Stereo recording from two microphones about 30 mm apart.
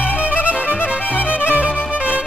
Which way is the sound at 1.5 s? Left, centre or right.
Right.